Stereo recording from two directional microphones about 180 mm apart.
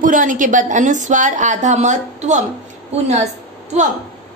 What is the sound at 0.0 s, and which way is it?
A woman's voice, 45° right (ahead or behind).